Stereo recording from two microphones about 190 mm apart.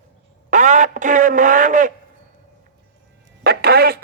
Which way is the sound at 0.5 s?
40° right (ahead or behind).